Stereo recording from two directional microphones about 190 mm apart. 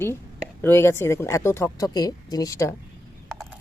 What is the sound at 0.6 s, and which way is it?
Speech, 15° left (ahead or behind).